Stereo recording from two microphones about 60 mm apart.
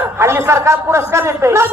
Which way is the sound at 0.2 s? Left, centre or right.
Right.